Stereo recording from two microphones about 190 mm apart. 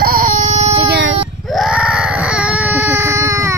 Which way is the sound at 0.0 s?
45° right (ahead or behind).